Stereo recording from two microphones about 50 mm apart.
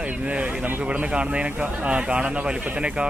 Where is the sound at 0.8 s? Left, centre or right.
Right.